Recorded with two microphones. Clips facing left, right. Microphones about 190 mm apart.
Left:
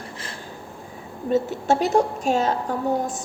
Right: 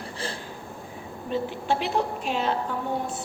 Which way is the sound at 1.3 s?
45° left (ahead or behind).